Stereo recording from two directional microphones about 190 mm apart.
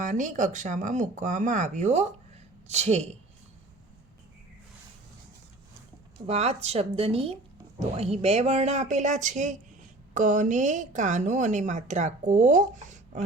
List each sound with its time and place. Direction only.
0.0 s a woman's voice: 40° right (ahead or behind)
6.1 s a woman's voice: 30° right (ahead or behind)